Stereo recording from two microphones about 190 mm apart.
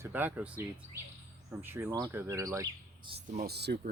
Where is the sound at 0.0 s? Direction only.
10° right (ahead or behind).